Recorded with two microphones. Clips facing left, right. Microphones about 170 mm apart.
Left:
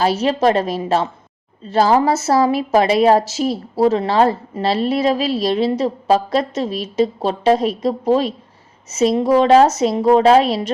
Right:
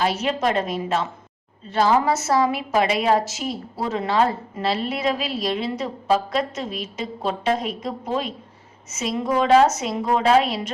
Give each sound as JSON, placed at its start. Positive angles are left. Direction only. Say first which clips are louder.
{"t": 0.0, "sound": "a woman's voice", "louder": "left 6 dB", "side_deg": 30}